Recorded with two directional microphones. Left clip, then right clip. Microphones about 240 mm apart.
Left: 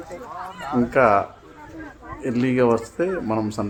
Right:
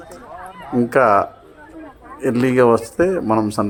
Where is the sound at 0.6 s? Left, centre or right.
Centre.